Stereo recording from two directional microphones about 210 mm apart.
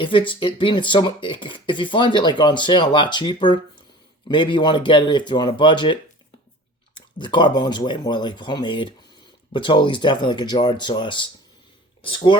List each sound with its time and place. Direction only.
0.0 s speech: 25° left (ahead or behind)